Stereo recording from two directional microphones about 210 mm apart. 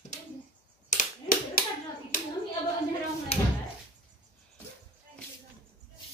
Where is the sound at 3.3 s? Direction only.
30° left (ahead or behind).